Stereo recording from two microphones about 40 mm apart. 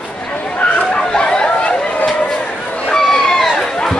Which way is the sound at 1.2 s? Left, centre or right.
Left.